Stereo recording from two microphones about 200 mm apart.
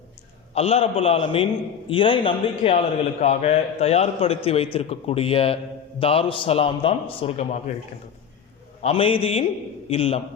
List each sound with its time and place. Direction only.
0.5 s a man's voice: 30° left (ahead or behind)
8.8 s a man's voice: 25° left (ahead or behind)